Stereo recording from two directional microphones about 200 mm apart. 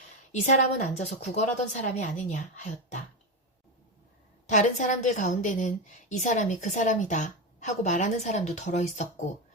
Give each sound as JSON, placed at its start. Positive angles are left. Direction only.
{"t": 0.4, "sound": "a woman's voice", "side_deg": 35}
{"t": 4.4, "sound": "a woman's voice", "side_deg": 40}